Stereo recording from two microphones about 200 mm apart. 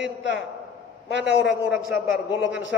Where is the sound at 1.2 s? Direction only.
5° right (ahead or behind).